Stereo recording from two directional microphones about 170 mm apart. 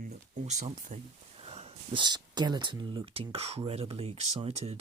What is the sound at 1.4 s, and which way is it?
Speech, 35° right (ahead or behind).